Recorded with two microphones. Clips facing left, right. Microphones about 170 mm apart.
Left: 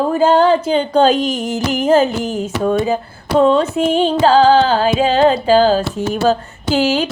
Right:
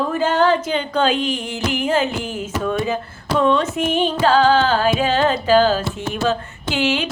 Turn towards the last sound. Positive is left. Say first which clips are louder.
# left 5 dB
turn(degrees=40)  # may be behind; listen again after turning